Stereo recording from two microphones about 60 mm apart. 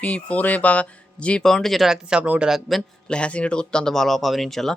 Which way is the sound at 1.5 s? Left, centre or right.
Centre.